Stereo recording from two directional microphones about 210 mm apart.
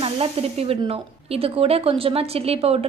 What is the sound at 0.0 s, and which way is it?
Speech, 30° right (ahead or behind).